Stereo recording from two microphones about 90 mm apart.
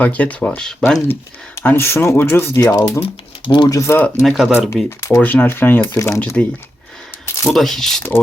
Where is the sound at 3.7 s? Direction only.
30° left (ahead or behind).